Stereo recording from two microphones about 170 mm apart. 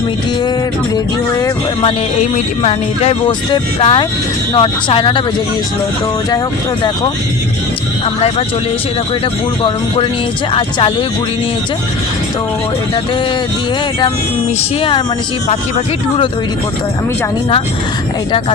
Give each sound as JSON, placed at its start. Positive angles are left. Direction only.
{"t": 2.6, "sound": "speech", "side_deg": 35}
{"t": 9.6, "sound": "speech", "side_deg": 30}